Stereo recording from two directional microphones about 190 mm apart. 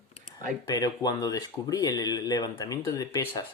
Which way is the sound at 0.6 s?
20° left (ahead or behind).